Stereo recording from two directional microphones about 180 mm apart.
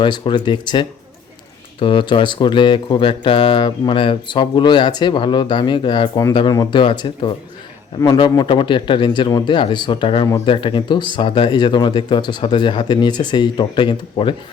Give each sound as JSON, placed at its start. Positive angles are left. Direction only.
{"t": 0.0, "sound": "speech", "side_deg": 25}